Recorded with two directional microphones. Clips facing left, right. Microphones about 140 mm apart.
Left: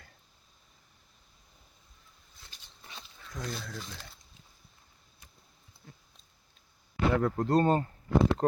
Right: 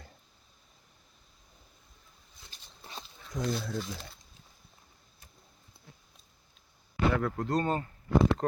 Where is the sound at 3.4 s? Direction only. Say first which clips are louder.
Right 6 dB; 15° right (ahead or behind).